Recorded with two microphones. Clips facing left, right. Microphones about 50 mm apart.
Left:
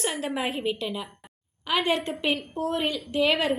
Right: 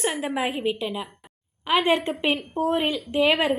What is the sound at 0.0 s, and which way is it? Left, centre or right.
A woman's voice, centre.